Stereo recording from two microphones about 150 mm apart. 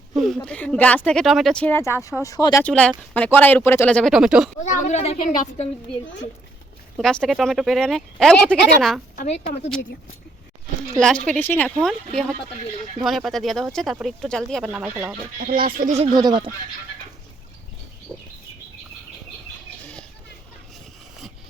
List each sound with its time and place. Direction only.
0.4 s speech: 5° left (ahead or behind)
1.8 s speech: 20° left (ahead or behind)
2.6 s speech: 5° left (ahead or behind)
4.1 s speech: 5° right (ahead or behind)
4.6 s a woman's voice: 55° left (ahead or behind)
6.9 s speech: 5° left (ahead or behind)
9.2 s a woman's voice: 45° left (ahead or behind)
10.9 s speech: 5° left (ahead or behind)
13.0 s speech: centre (ahead or behind)
15.4 s speech: 70° right (ahead or behind)
16.1 s speech: 30° right (ahead or behind)
18.1 s bird: 5° right (ahead or behind)
19.8 s children playing: 5° left (ahead or behind)